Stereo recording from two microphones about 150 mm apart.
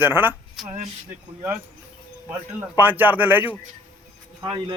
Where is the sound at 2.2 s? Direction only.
10° right (ahead or behind).